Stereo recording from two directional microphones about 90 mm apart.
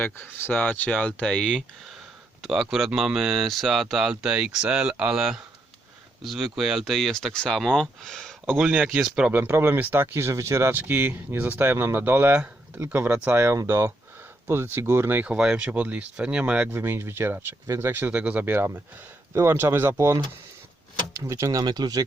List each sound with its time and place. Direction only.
0.0 s speech: 25° left (ahead or behind); by 1.6 s 10° left (ahead or behind)
2.4 s speech: 5° right (ahead or behind)
8.5 s speech: 15° right (ahead or behind)
9.3 s speech: 25° right (ahead or behind)
16.7 s speech: 25° right (ahead or behind)
21.6 s speech: 50° right (ahead or behind)